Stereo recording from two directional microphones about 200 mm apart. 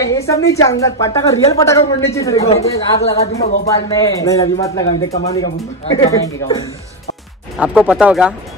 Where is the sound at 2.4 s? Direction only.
30° left (ahead or behind).